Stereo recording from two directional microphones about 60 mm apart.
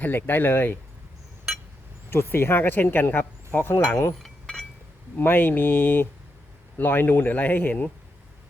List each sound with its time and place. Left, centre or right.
0.0 s speech: left
2.0 s speech: left
4.2 s a sound: centre
5.1 s speech: left